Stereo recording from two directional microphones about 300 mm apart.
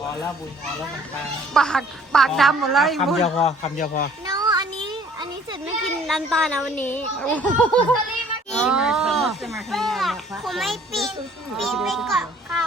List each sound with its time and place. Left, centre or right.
1.5 s speech: centre
3.2 s speech: left
4.3 s a sound: centre
6.1 s speech: centre
8.4 s a sound: centre
11.5 s a child's voice: centre